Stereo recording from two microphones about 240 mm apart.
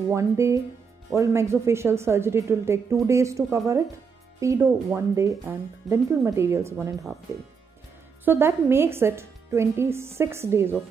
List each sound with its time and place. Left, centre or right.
0.1 s speech: centre
8.3 s speech: centre